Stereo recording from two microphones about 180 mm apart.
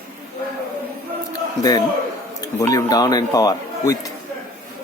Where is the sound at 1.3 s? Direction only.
20° left (ahead or behind).